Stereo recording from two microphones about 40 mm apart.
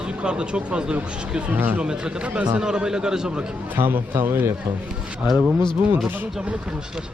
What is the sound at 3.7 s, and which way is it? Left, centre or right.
Speech, right.